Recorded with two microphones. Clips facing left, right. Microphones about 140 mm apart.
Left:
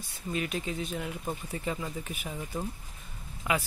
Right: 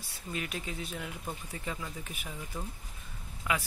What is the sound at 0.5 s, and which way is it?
Speech, 25° left (ahead or behind).